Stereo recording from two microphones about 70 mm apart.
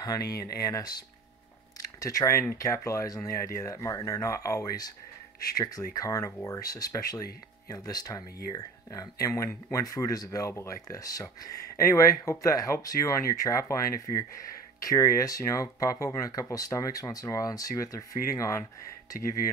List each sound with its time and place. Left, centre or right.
0.0 s speech: left
2.0 s speech: left
9.3 s speech: left
10.5 s speech: left
10.9 s speech: left